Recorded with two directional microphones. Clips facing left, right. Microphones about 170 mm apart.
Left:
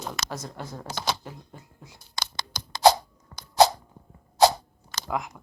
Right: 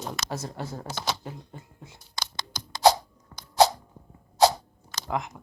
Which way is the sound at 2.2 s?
70° left (ahead or behind).